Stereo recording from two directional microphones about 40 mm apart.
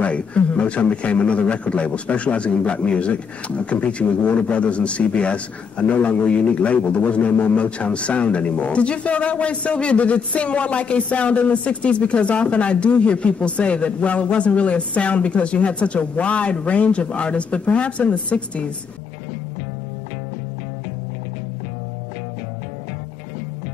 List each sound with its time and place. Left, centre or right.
0.0 s a man's voice: left